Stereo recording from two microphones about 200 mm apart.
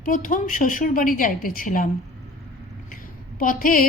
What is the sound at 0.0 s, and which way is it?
A woman's voice, 45° left (ahead or behind).